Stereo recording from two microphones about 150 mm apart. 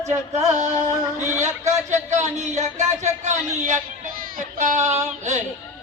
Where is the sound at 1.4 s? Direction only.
50° right (ahead or behind).